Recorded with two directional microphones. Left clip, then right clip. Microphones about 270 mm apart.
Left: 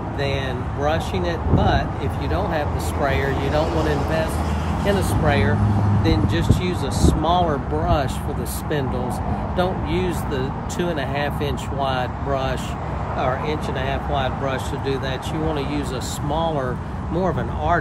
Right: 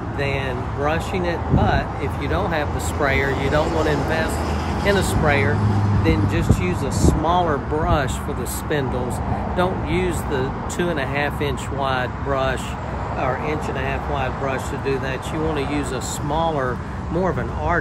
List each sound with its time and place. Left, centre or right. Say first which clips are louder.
0.8 s speech: even; centre
4.8 s speech: right 2 dB; centre
9.6 s speech: right 1 dB; centre
16.3 s speech: right 1 dB; centre